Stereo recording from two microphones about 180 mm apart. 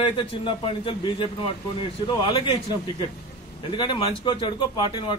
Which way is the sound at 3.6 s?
30° left (ahead or behind).